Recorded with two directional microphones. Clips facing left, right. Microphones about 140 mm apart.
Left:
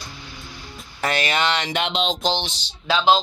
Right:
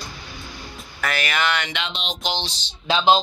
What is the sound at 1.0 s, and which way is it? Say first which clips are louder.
Speech: left 2 dB; 30° left (ahead or behind).